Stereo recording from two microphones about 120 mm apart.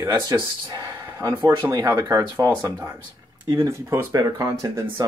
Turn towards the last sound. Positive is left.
turn(degrees=-25)  # may be behind; listen again after turning